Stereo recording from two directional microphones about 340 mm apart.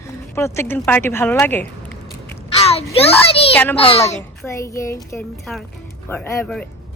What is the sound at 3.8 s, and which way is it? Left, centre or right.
Speech, centre.